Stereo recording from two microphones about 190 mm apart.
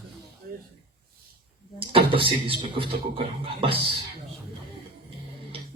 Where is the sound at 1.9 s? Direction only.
25° right (ahead or behind).